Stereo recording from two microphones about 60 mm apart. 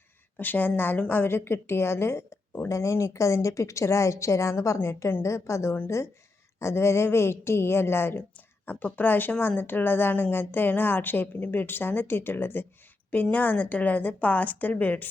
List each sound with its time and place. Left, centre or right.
0.3 s a woman's voice: left
2.6 s a woman's voice: left
8.6 s a woman's voice: left
13.3 s a woman's voice: left